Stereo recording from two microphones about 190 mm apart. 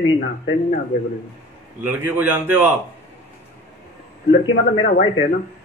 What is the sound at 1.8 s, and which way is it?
Speech, 10° right (ahead or behind).